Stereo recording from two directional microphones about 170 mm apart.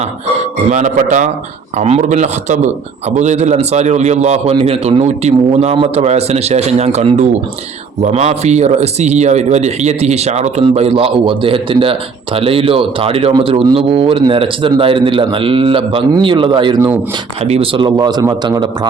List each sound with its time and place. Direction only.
0.7 s a man's voice: 45° right (ahead or behind); by 18.9 s 25° right (ahead or behind)